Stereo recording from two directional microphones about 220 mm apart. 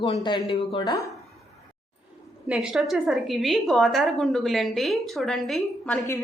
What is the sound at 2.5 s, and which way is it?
A woman's voice, 5° right (ahead or behind).